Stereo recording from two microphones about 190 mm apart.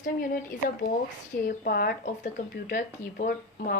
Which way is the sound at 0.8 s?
50° left (ahead or behind).